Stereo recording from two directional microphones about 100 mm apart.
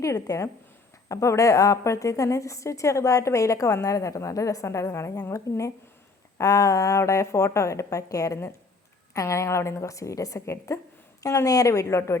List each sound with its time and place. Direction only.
0.0 s a woman's voice: 35° left (ahead or behind)